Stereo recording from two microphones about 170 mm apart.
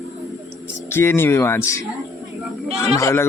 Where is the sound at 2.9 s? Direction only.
15° left (ahead or behind).